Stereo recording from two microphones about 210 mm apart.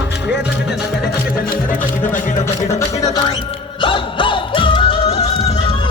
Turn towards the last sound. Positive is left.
turn(degrees=30)  # may be behind; listen again after turning